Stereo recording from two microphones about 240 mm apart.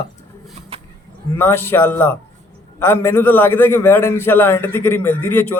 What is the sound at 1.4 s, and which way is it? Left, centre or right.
A man's voice, centre.